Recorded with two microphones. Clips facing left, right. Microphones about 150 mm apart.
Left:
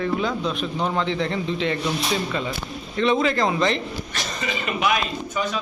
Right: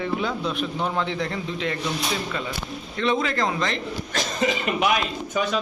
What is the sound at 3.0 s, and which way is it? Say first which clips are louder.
Speech: left 4 dB; centre (ahead or behind).